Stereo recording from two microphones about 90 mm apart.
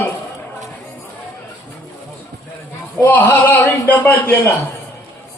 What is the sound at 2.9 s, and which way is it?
A man's voice, 20° left (ahead or behind).